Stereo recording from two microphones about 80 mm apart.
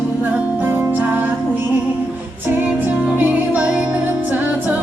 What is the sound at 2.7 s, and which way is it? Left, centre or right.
Music, centre.